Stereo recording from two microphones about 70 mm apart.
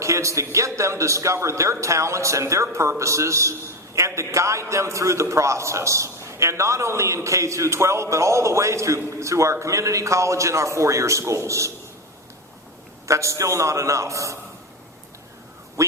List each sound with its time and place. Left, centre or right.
0.0 s a man's voice: right
13.1 s a man's voice: right
15.8 s speech: right